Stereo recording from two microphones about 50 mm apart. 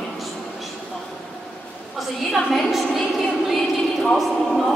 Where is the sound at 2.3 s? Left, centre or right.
Centre.